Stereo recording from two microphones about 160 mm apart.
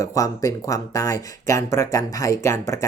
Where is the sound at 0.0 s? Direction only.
20° left (ahead or behind).